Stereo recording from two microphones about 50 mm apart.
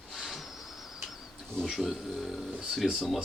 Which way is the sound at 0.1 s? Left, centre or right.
Centre.